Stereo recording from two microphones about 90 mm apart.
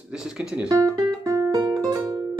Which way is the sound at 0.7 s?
35° right (ahead or behind).